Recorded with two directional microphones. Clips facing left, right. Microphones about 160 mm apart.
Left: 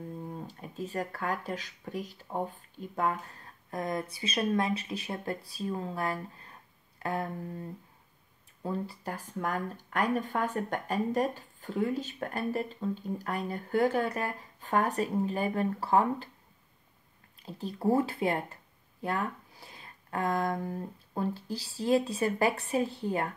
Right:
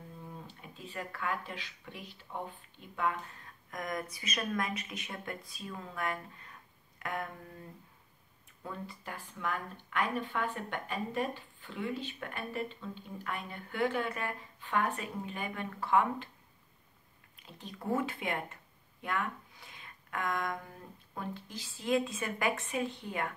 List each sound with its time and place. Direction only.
0.3 s speech: 40° left (ahead or behind)
8.6 s speech: 35° left (ahead or behind)
17.4 s speech: 35° left (ahead or behind)